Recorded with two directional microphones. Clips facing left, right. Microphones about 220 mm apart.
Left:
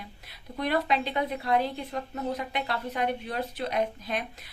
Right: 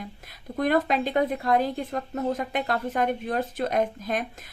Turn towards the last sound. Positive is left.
turn(degrees=-45)  # may be behind; listen again after turning